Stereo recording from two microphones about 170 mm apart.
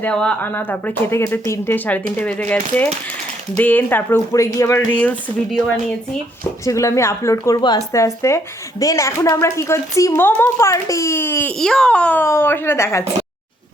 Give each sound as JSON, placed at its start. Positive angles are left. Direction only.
{"t": 0.0, "sound": "a woman's voice", "side_deg": 5}